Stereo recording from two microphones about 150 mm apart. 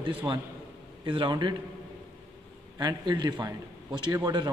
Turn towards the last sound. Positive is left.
turn(degrees=-25)  # may be behind; listen again after turning